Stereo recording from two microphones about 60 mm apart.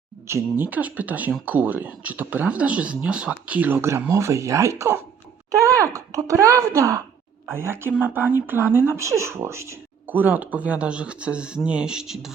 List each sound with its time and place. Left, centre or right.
0.5 s speech: right
3.7 s speech: right
7.5 s speech: right
9.0 s speech: right
10.1 s speech: right; by 12.3 s centre